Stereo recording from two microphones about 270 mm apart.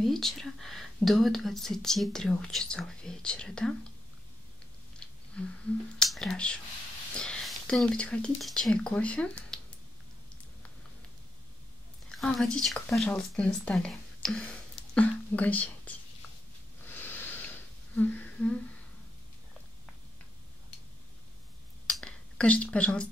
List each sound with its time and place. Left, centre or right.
0.0 s speech: centre
5.0 s a sound: centre
5.9 s speech: centre
12.2 s speech: centre
16.8 s wheeze: centre
21.8 s a sound: centre